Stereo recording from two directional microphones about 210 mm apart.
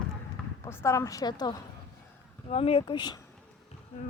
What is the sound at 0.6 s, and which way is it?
A woman's voice, 10° left (ahead or behind).